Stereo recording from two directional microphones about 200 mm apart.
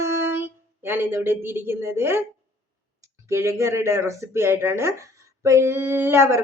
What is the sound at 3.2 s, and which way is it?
Speech, 15° right (ahead or behind).